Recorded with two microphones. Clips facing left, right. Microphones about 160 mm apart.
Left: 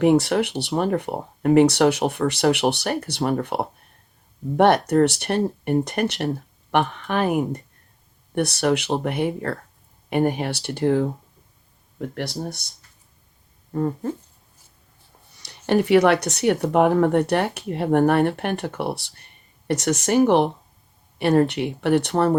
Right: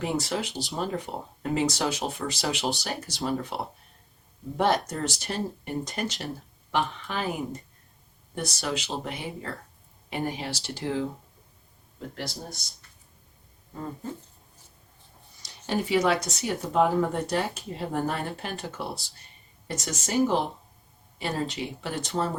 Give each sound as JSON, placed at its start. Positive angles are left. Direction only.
{"t": 0.0, "sound": "speech", "side_deg": 65}
{"t": 13.7, "sound": "speech", "side_deg": 60}
{"t": 15.4, "sound": "speech", "side_deg": 65}